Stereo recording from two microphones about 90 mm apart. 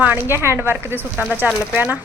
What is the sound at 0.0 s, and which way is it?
A woman's voice, 25° right (ahead or behind).